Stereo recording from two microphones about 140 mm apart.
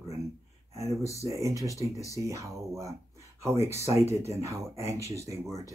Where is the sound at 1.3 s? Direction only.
20° right (ahead or behind).